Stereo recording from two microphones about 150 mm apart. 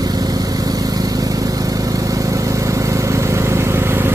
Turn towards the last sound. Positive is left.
turn(degrees=-15)  # may be behind; listen again after turning